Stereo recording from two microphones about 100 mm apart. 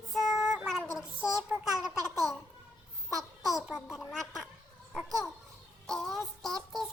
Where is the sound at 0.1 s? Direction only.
5° right (ahead or behind).